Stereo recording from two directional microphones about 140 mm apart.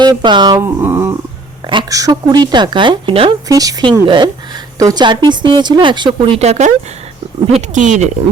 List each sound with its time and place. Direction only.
0.0 s a woman's voice: 30° right (ahead or behind)
0.6 s a sound: 15° right (ahead or behind)
1.6 s a woman's voice: 30° right (ahead or behind)
3.5 s a woman's voice: 25° right (ahead or behind); by 8.1 s 60° right (ahead or behind)